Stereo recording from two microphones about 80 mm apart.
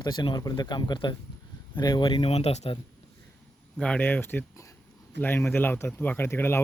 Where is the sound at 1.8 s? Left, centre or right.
Left.